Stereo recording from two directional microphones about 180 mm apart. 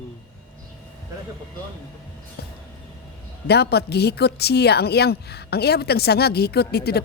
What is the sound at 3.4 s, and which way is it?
A woman's voice, 65° left (ahead or behind).